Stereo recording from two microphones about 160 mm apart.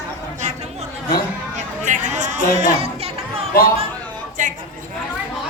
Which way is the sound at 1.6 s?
50° right (ahead or behind).